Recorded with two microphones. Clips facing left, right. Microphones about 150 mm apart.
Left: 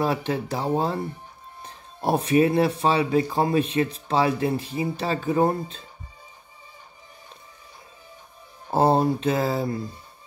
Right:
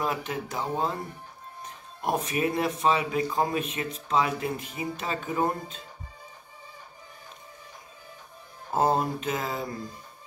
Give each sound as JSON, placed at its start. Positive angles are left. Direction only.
{"t": 0.0, "sound": "speech", "side_deg": 35}
{"t": 8.6, "sound": "speech", "side_deg": 30}